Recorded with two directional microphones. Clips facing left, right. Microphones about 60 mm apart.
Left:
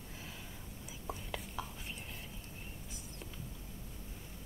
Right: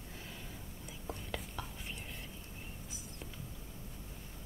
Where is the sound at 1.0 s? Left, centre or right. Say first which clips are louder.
Even; centre.